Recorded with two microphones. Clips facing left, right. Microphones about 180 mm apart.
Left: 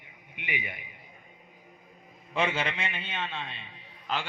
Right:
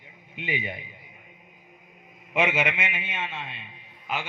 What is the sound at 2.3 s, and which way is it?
A man's voice, 10° right (ahead or behind).